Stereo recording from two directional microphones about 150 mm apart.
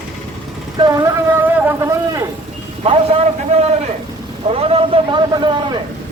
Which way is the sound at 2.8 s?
40° right (ahead or behind).